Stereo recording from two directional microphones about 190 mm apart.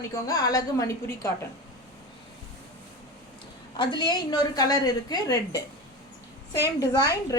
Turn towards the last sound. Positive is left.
turn(degrees=15)  # may be behind; listen again after turning